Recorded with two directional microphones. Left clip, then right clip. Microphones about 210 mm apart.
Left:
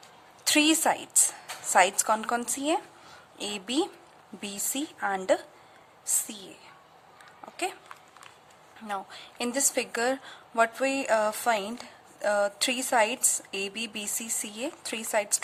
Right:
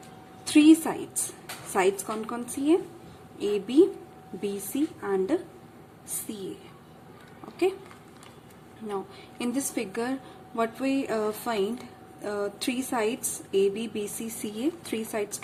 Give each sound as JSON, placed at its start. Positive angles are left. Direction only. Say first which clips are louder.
{"t": 0.5, "sound": "a woman's voice", "louder": "right 4 dB", "side_deg": 30}
{"t": 9.4, "sound": "speech", "louder": "left 2 dB", "side_deg": 30}